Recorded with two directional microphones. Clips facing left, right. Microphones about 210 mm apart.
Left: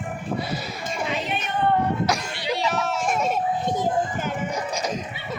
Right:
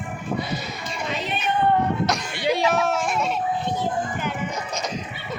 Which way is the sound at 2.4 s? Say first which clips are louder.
Right 7 dB; 50° right (ahead or behind).